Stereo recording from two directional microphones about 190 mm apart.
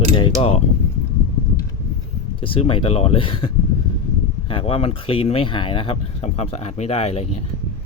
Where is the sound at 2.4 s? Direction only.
25° left (ahead or behind).